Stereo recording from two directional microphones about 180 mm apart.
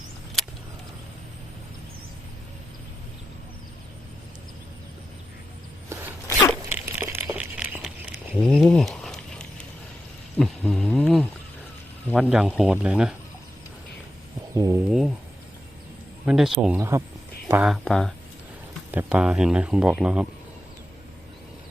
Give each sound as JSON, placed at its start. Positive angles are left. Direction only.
{"t": 0.4, "sound": "vehicle", "side_deg": 0}
{"t": 6.7, "sound": "a sound", "side_deg": -10}
{"t": 12.1, "sound": "speech", "side_deg": -5}
{"t": 14.5, "sound": "speech", "side_deg": -15}
{"t": 16.2, "sound": "speech", "side_deg": 0}